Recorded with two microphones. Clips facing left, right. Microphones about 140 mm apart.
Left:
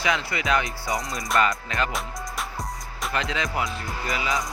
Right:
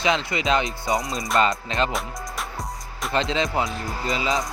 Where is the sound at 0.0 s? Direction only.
20° right (ahead or behind).